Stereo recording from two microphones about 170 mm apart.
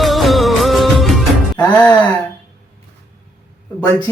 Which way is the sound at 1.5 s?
10° left (ahead or behind).